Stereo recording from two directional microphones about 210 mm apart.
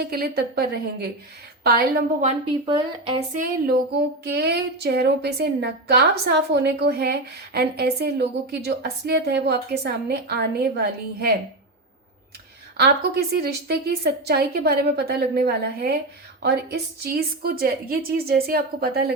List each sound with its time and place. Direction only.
0.0 s a woman's voice: 50° right (ahead or behind)
2.2 s speech: 25° right (ahead or behind); by 3.8 s 40° right (ahead or behind)
4.2 s a woman's voice: 50° right (ahead or behind)
12.7 s a woman's voice: 50° right (ahead or behind)